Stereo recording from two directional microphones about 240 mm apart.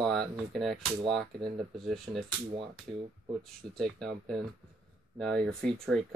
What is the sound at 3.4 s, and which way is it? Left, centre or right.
Speech, centre.